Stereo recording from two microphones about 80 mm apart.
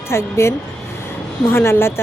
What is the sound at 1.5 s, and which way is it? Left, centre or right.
Speech, left.